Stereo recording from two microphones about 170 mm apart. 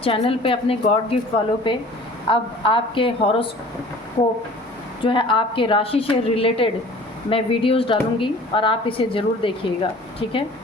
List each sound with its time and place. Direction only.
0.0 s a woman's voice: 35° left (ahead or behind)
5.0 s a woman's voice: 30° left (ahead or behind)